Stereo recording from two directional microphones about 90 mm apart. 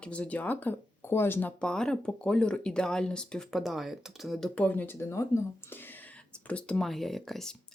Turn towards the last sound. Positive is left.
turn(degrees=5)  # may be behind; listen again after turning